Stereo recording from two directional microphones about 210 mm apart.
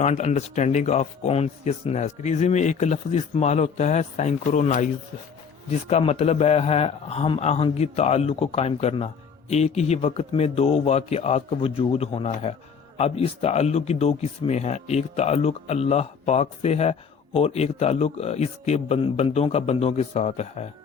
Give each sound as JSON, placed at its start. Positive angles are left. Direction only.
{"t": 0.0, "sound": "speech", "side_deg": 30}
{"t": 5.9, "sound": "a man's voice", "side_deg": 30}